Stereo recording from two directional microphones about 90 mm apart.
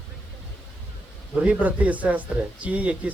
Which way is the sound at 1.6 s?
15° right (ahead or behind).